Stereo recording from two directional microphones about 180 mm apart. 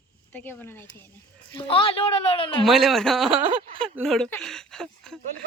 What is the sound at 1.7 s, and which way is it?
Speech, 30° left (ahead or behind).